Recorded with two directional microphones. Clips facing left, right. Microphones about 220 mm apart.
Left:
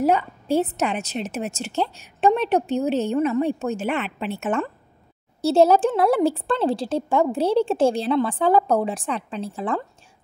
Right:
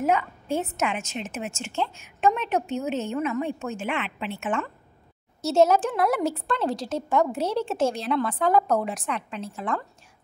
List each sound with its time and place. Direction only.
0.0 s a woman's voice: 35° left (ahead or behind)